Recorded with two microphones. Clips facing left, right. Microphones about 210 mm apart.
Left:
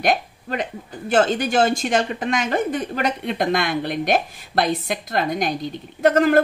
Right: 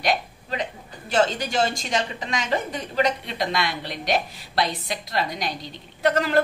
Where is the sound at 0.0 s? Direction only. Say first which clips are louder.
Left 4 dB; 50° left (ahead or behind).